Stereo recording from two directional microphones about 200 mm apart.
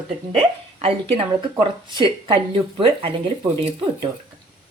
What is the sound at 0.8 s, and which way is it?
Speech, 30° right (ahead or behind).